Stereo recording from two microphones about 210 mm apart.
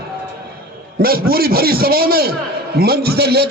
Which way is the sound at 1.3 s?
45° right (ahead or behind).